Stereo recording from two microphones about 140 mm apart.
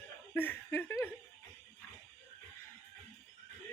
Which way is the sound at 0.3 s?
15° left (ahead or behind).